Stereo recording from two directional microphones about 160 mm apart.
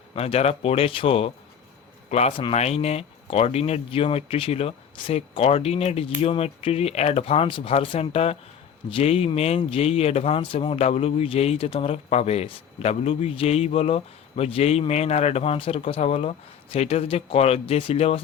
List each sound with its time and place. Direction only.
0.1 s speech: 40° left (ahead or behind)